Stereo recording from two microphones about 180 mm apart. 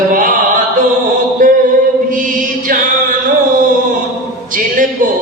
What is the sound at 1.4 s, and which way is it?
Mantra, 50° right (ahead or behind).